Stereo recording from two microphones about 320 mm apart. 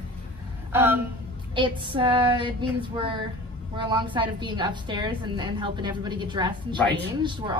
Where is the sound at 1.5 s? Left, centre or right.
Centre.